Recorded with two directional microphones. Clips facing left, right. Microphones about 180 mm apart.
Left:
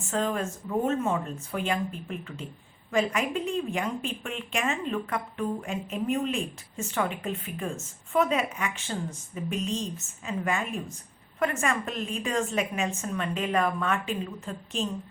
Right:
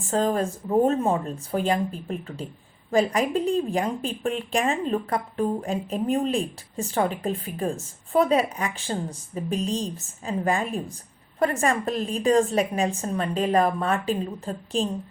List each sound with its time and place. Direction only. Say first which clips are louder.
0.0 s a woman's voice: right 5 dB; 35° right (ahead or behind)